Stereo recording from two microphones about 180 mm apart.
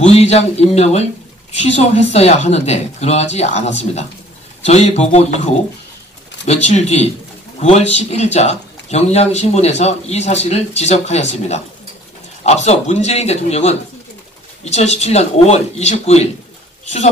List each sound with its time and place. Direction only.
0.0 s speech: 35° left (ahead or behind)